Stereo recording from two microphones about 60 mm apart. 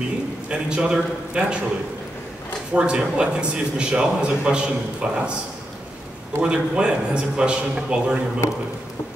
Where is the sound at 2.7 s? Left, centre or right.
Centre.